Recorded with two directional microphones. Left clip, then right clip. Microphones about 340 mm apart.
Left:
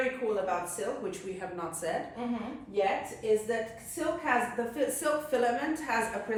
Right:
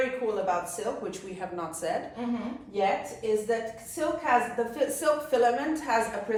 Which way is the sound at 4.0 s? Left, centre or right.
Centre.